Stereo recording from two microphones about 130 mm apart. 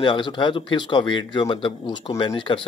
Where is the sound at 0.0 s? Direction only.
35° left (ahead or behind).